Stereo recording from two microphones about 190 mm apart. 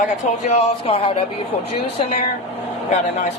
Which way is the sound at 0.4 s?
30° left (ahead or behind).